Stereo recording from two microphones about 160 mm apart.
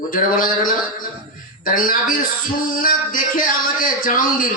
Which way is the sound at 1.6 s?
60° left (ahead or behind).